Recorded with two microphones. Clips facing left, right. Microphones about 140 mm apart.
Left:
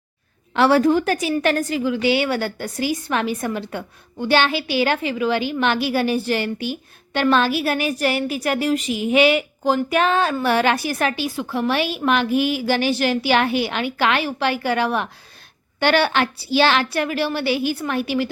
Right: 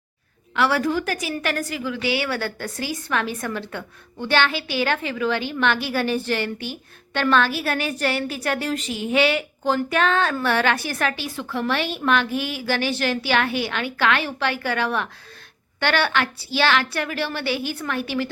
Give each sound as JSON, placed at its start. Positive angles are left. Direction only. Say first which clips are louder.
{"t": 0.5, "sound": "a woman's voice", "louder": "left 6 dB", "side_deg": 30}